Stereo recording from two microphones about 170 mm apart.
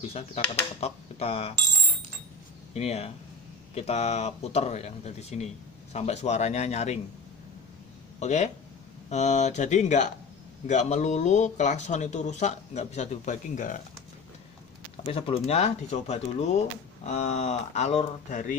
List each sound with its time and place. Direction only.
0.7 s speech: 35° left (ahead or behind)
8.2 s speech: 45° left (ahead or behind)
15.0 s speech: 35° left (ahead or behind)